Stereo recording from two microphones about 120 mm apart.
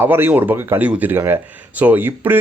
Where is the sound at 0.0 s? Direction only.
15° right (ahead or behind).